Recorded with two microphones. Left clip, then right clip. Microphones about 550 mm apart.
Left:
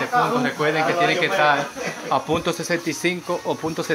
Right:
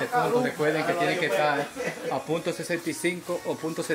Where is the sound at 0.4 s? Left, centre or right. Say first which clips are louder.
Left 5 dB; right.